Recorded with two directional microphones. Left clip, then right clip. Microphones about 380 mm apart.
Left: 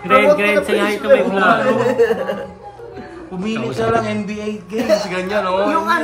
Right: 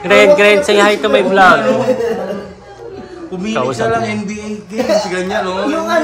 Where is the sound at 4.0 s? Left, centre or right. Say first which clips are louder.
Right 2 dB; left.